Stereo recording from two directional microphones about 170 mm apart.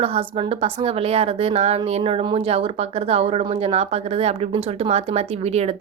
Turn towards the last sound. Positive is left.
turn(degrees=-40)  # may be behind; listen again after turning